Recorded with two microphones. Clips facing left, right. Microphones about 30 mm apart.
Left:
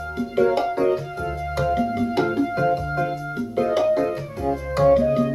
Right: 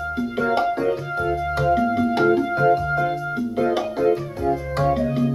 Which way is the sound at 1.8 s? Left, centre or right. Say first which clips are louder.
Right 3 dB; centre.